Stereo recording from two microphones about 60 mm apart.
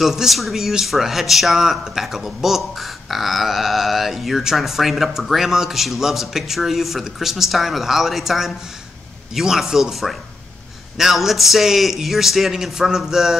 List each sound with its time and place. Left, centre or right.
0.0 s speech: centre